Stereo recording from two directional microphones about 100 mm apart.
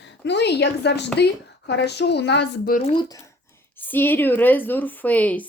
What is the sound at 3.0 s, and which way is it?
Speech, 40° left (ahead or behind).